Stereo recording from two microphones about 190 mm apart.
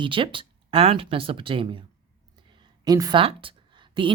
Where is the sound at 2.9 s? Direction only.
20° right (ahead or behind).